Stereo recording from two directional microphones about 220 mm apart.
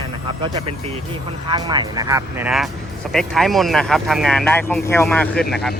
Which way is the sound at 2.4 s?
Centre (ahead or behind).